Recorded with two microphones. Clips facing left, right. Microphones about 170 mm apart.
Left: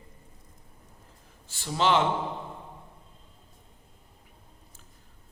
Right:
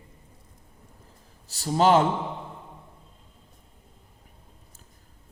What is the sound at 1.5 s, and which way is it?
Speech, 40° right (ahead or behind).